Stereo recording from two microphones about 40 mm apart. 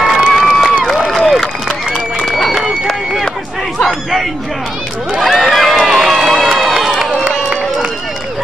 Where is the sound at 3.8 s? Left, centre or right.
Centre.